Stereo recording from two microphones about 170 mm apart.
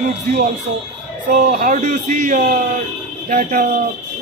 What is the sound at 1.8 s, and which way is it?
A man's voice, 45° right (ahead or behind).